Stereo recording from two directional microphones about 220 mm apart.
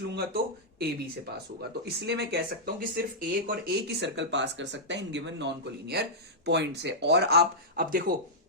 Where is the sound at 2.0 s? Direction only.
50° right (ahead or behind).